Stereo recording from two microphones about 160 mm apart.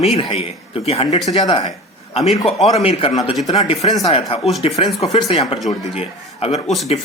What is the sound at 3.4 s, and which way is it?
Speech, 25° left (ahead or behind).